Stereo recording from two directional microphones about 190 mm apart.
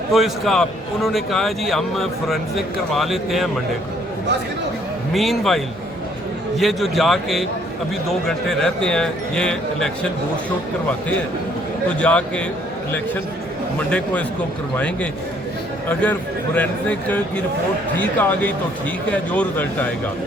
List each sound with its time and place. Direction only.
0.1 s a man's voice: centre (ahead or behind)
5.1 s a man's voice: centre (ahead or behind)
11.9 s speech: 5° left (ahead or behind)
13.7 s speech: 10° left (ahead or behind)
15.9 s speech: 10° left (ahead or behind)